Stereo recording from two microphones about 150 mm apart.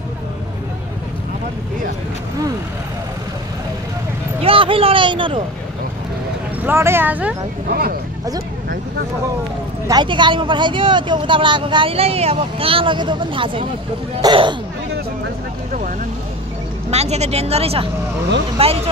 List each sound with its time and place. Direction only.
4.4 s a sound: 35° right (ahead or behind)
6.6 s speech: 15° right (ahead or behind)
9.8 s speech: 30° right (ahead or behind)
16.9 s a woman's voice: 45° right (ahead or behind)